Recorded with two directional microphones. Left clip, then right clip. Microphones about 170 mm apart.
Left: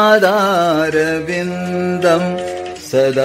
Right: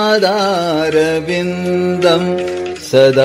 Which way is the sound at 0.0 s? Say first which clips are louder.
Left 2 dB; 20° left (ahead or behind).